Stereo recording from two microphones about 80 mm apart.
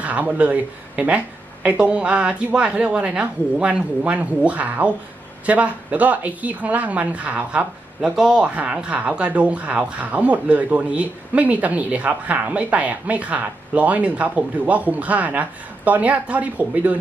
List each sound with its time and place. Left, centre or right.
0.0 s speech: centre